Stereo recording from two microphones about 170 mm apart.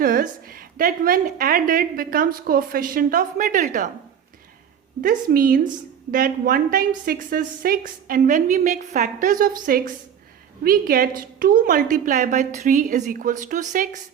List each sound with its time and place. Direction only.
0.0 s a woman's voice: 55° right (ahead or behind)
4.9 s a woman's voice: 55° right (ahead or behind)